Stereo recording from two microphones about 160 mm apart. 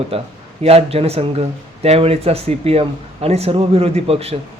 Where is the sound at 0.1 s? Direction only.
35° right (ahead or behind).